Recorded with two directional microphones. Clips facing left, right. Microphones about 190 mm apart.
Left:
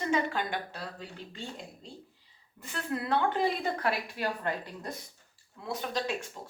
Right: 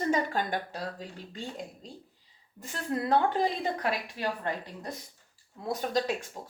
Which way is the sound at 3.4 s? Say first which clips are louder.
Even; 20° right (ahead or behind).